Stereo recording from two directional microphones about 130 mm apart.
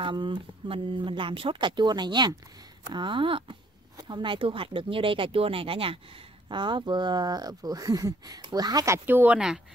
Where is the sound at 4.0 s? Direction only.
35° right (ahead or behind).